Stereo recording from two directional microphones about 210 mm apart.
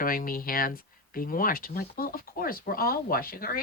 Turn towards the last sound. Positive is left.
turn(degrees=45)  # may be behind; listen again after turning